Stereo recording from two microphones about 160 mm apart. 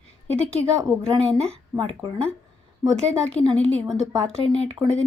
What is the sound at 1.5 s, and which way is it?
Speech, 35° right (ahead or behind).